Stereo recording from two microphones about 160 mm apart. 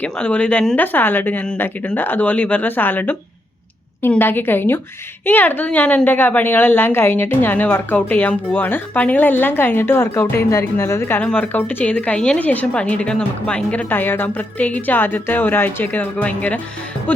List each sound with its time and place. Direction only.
0.0 s a woman's voice: 10° left (ahead or behind)